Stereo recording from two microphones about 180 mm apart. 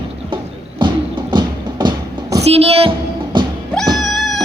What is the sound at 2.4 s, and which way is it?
Speech, 35° right (ahead or behind).